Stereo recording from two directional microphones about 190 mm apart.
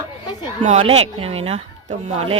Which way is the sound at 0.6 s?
35° right (ahead or behind).